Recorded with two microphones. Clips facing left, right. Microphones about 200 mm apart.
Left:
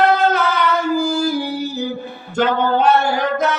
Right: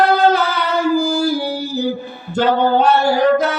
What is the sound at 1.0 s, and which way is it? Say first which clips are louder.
Music: right 1 dB; 35° right (ahead or behind).